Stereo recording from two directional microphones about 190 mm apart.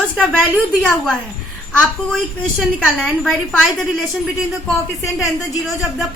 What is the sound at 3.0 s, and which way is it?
Speech, centre (ahead or behind).